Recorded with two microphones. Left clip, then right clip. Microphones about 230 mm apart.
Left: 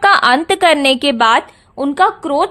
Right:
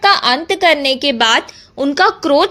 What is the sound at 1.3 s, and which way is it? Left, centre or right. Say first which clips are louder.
A woman's voice: left 1 dB; centre.